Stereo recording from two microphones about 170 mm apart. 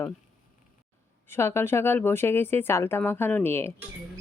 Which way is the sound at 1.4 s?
15° left (ahead or behind).